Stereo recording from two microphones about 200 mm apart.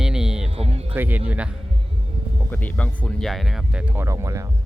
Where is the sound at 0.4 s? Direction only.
30° right (ahead or behind).